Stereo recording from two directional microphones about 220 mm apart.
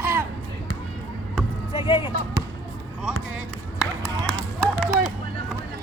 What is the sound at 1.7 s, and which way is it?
Speech, 25° left (ahead or behind).